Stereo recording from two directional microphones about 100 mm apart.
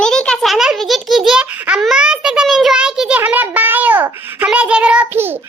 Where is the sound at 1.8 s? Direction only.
5° right (ahead or behind).